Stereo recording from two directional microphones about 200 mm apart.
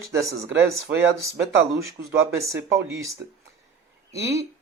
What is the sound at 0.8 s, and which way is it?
Speech, 60° right (ahead or behind).